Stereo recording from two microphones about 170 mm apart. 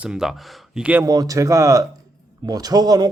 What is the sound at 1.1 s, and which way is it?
Speech, 20° right (ahead or behind).